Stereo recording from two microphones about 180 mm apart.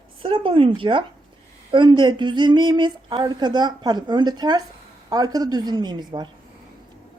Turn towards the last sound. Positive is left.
turn(degrees=-25)  # may be behind; listen again after turning